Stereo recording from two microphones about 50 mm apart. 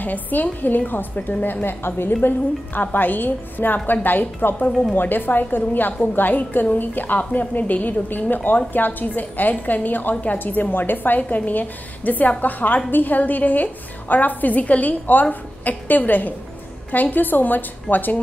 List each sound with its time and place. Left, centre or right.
0.0 s a woman's voice: left